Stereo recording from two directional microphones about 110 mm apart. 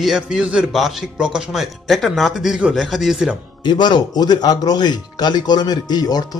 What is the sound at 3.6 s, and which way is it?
A man's voice, 40° left (ahead or behind).